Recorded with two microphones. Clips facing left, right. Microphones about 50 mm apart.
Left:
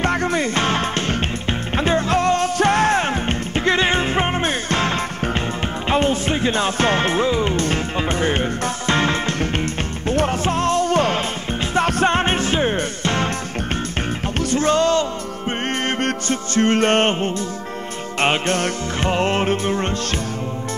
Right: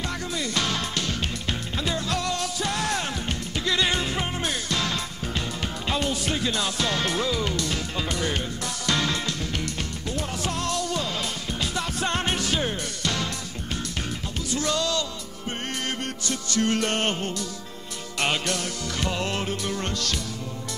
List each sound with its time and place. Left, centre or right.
0.0 s music: left
14.5 s music: left